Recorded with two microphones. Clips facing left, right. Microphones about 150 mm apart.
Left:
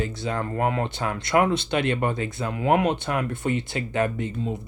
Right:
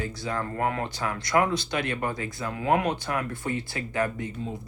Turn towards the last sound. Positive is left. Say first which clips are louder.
# left 3 dB
turn(degrees=20)  # may be behind; listen again after turning